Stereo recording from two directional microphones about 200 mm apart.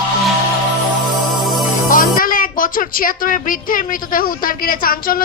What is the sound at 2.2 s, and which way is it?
A woman's voice, 45° left (ahead or behind).